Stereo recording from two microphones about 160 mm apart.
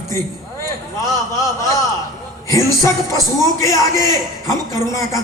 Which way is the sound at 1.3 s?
20° left (ahead or behind).